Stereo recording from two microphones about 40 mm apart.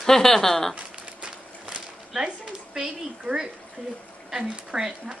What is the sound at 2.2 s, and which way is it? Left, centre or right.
Speech, centre.